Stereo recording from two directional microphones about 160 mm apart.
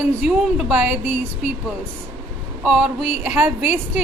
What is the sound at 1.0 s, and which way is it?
Speech, 45° left (ahead or behind).